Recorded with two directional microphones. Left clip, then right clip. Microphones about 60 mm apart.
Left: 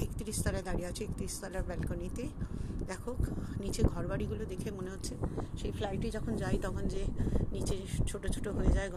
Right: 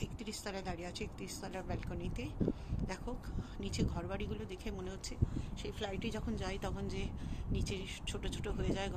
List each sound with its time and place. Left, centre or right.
3.6 s speech: left
5.8 s speech: left